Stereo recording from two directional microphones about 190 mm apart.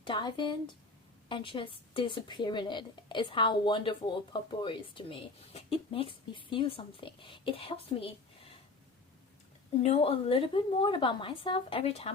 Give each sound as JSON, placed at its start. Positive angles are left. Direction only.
{"t": 0.0, "sound": "speech", "side_deg": 25}
{"t": 9.8, "sound": "speech", "side_deg": 35}